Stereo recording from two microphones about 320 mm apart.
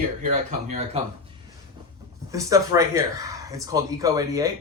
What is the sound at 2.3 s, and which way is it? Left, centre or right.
Speech, centre.